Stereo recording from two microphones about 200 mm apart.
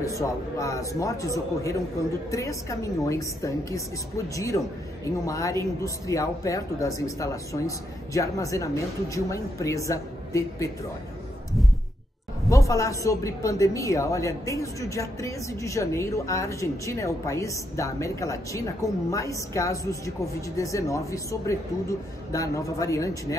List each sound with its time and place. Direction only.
0.0 s a man's voice: 15° left (ahead or behind)
4.5 s a man's voice: 25° left (ahead or behind)
5.0 s a man's voice: 15° left (ahead or behind)
12.4 s a man's voice: 15° left (ahead or behind)